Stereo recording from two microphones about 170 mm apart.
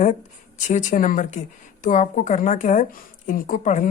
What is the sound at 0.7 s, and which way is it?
Speech, 45° left (ahead or behind).